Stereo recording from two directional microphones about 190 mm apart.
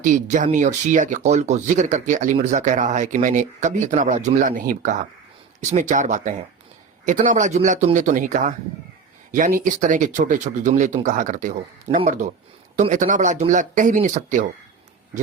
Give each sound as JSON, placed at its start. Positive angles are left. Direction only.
{"t": 0.0, "sound": "speech", "side_deg": -45}
{"t": 7.3, "sound": "speech", "side_deg": -40}